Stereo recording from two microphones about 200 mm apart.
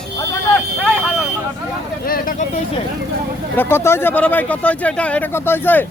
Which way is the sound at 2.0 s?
45° left (ahead or behind).